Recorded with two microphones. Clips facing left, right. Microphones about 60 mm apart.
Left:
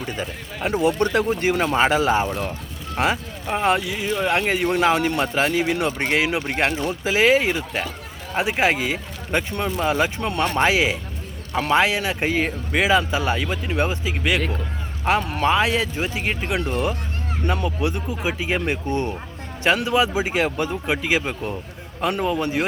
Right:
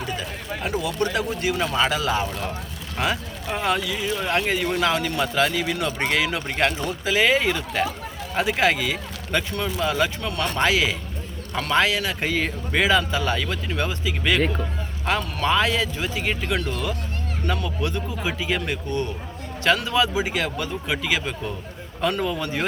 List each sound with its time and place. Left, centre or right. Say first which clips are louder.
0.2 s speech: left 2 dB; left
15.2 s speech: left 2 dB; left